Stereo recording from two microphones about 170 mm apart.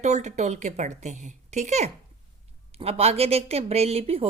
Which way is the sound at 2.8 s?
35° right (ahead or behind).